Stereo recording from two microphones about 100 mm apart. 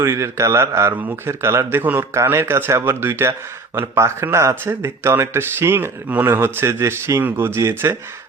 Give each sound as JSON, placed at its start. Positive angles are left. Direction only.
{"t": 0.0, "sound": "speech", "side_deg": -30}